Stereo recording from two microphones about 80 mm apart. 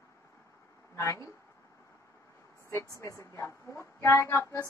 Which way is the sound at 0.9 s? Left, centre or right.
Left.